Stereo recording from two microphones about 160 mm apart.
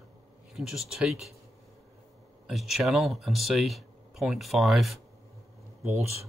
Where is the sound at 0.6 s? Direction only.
5° right (ahead or behind).